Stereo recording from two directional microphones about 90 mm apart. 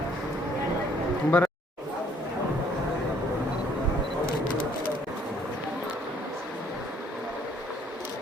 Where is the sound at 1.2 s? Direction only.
20° left (ahead or behind).